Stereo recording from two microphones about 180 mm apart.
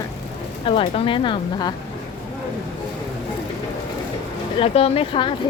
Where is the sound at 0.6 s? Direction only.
30° left (ahead or behind).